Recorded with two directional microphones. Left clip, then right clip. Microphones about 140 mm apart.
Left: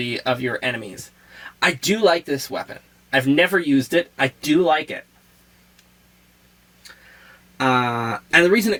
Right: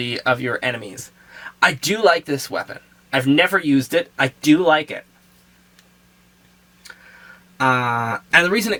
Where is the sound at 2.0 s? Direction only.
35° right (ahead or behind).